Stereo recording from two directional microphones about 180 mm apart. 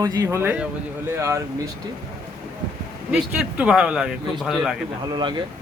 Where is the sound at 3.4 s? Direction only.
5° right (ahead or behind).